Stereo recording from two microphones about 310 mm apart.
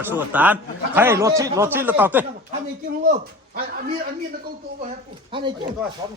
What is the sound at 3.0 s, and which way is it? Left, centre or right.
Speech, right.